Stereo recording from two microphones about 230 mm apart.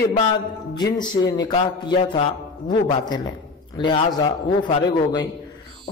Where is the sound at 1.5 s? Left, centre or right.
Centre.